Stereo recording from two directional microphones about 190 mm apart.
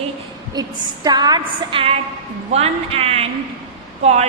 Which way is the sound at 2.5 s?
35° right (ahead or behind).